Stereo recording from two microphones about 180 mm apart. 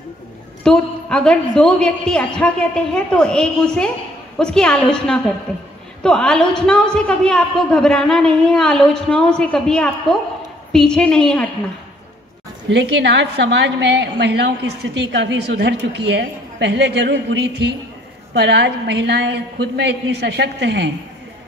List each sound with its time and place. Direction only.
0.7 s a woman's voice: 5° left (ahead or behind)
12.6 s a woman's voice: 85° right